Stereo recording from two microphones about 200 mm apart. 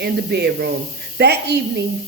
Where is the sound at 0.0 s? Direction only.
55° right (ahead or behind).